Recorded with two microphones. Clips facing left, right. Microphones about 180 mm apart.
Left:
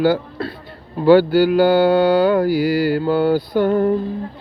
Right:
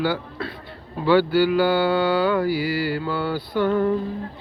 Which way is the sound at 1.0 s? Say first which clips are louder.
Left 6 dB; 45° left (ahead or behind).